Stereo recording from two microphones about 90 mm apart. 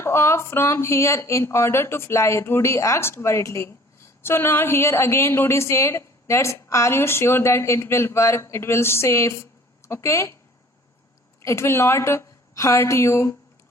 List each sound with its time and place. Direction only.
0.0 s speech: 30° left (ahead or behind)
11.4 s a woman's voice: 30° left (ahead or behind)